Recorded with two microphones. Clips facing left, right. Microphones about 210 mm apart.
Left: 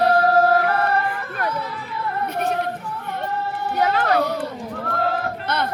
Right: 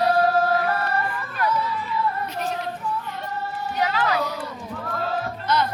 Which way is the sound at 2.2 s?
60° left (ahead or behind).